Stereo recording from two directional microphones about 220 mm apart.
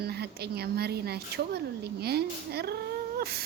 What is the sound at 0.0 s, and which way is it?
A woman's voice, 45° right (ahead or behind).